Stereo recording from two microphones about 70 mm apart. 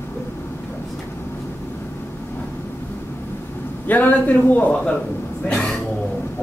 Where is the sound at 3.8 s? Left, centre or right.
Left.